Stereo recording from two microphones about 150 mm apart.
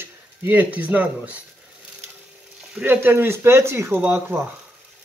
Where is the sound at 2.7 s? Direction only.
10° right (ahead or behind).